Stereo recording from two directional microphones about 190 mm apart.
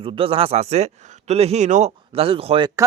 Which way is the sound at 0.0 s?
30° right (ahead or behind).